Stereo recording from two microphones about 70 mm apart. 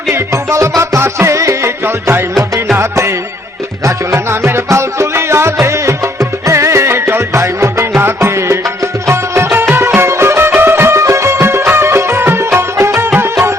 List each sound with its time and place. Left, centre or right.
0.1 s music: right
1.8 s music: right